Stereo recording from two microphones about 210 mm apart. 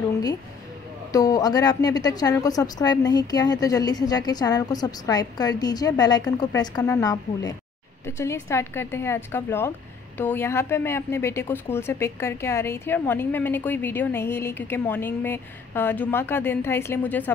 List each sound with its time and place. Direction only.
1.1 s a woman's voice: 15° left (ahead or behind)